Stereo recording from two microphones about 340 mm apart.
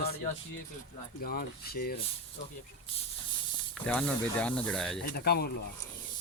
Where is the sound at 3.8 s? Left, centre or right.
Centre.